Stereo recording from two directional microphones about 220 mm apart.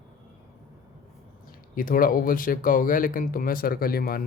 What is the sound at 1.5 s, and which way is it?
Speech, 40° left (ahead or behind).